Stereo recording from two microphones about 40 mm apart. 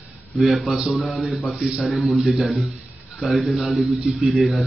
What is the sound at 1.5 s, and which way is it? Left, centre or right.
Speech, right.